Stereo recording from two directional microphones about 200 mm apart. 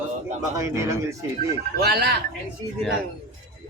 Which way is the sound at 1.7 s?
50° right (ahead or behind).